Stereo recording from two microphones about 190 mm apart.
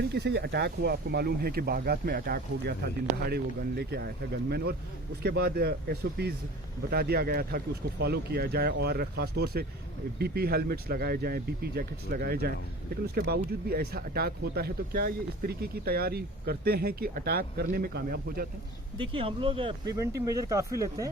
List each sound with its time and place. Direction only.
0.1 s speech: 65° right (ahead or behind)
19.1 s speech: 30° right (ahead or behind)